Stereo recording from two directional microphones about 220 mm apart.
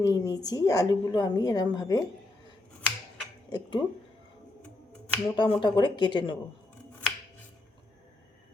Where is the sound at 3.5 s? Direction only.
20° left (ahead or behind).